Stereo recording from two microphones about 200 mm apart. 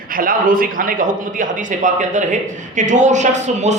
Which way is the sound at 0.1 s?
45° right (ahead or behind).